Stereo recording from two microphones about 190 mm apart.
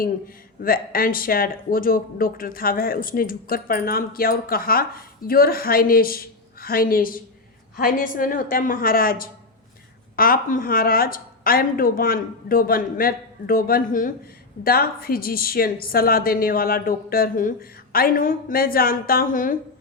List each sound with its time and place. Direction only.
0.0 s speech: 50° left (ahead or behind)